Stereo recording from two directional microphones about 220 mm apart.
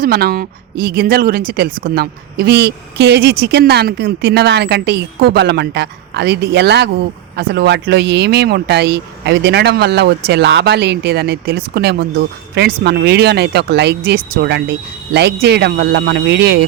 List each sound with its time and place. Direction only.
0.0 s speech: 45° right (ahead or behind)